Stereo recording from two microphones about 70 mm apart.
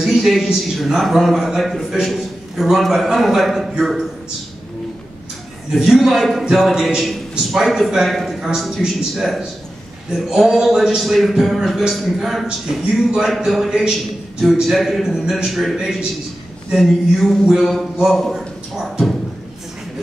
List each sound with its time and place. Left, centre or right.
0.0 s a man's voice: centre
5.8 s a man's voice: centre